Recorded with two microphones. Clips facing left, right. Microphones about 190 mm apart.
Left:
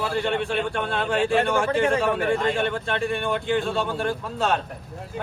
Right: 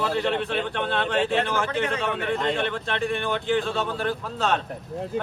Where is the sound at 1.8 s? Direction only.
45° left (ahead or behind).